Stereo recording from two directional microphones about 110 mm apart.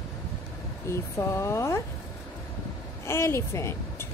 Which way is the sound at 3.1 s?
25° left (ahead or behind).